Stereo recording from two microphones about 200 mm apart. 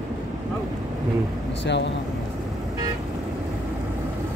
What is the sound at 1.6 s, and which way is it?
Speech, 60° left (ahead or behind).